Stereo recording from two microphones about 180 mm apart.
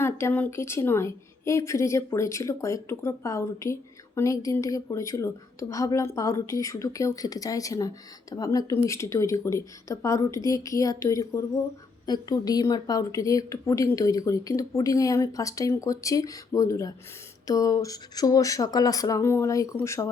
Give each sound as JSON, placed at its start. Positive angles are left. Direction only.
{"t": 0.0, "sound": "a woman's voice", "side_deg": 15}